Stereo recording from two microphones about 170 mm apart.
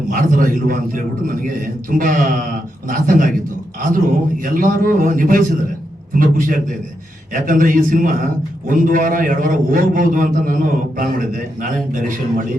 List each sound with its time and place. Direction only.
0.1 s a man's voice: 50° right (ahead or behind)
4.4 s a man's voice: 55° right (ahead or behind)